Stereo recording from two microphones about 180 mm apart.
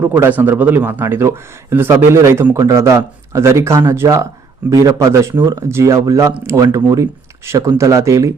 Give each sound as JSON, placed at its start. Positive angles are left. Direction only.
{"t": 0.0, "sound": "speech", "side_deg": -10}